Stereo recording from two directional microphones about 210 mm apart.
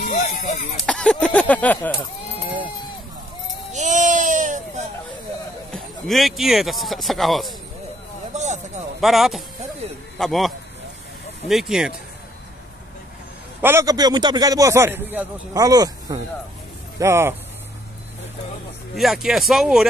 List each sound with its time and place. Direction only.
0.8 s speech: 5° left (ahead or behind)
3.7 s a sound: 35° right (ahead or behind)
5.7 s speech: centre (ahead or behind)
8.3 s a sound: 35° right (ahead or behind)
9.0 s speech: centre (ahead or behind)
13.6 s a man's voice: 10° right (ahead or behind)
18.9 s speech: centre (ahead or behind)